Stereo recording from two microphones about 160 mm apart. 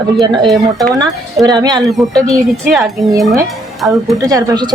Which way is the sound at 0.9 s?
25° right (ahead or behind).